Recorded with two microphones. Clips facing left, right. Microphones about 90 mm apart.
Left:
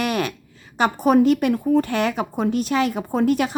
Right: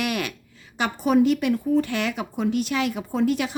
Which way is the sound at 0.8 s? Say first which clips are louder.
Left 3 dB; 45° left (ahead or behind).